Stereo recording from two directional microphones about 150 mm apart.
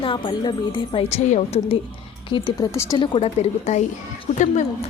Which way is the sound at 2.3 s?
30° left (ahead or behind).